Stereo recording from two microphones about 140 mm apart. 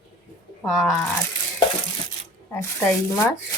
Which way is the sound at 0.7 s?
Centre (ahead or behind).